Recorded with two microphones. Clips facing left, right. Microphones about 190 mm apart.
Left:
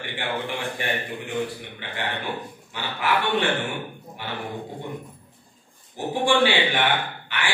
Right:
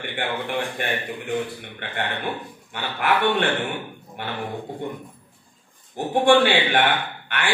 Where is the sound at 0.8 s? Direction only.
60° right (ahead or behind).